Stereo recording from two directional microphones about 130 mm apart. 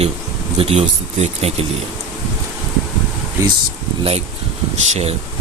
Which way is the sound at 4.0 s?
50° right (ahead or behind).